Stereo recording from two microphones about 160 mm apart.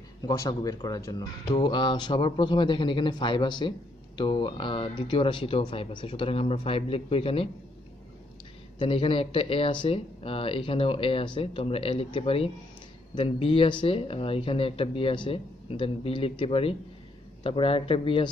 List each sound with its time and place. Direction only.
0.3 s a man's voice: 25° left (ahead or behind)
8.7 s speech: 35° left (ahead or behind)